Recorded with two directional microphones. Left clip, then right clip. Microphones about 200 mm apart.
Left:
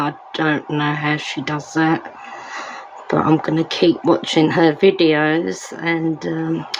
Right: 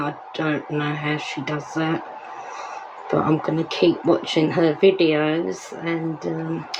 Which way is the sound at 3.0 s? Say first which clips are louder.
Left 4 dB; 30° left (ahead or behind).